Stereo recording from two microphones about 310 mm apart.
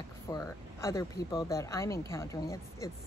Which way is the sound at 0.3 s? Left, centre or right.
Centre.